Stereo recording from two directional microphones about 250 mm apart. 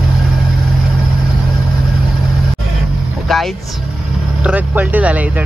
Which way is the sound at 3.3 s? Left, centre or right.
Centre.